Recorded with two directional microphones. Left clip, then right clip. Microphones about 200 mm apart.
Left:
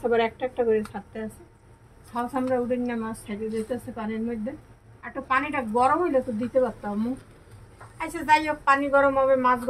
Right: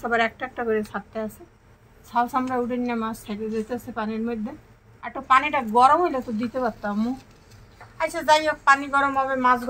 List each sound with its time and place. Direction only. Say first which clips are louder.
0.0 s a woman's voice: even; 25° right (ahead or behind)
2.1 s speech: right 3 dB; 40° right (ahead or behind)
8.0 s speech: right 2 dB; 35° right (ahead or behind)